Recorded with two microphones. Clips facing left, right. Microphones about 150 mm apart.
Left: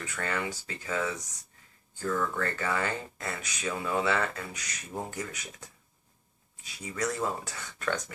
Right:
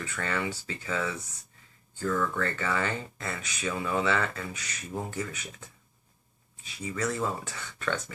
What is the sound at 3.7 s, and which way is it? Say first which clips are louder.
Speech: right 1 dB; 10° left (ahead or behind).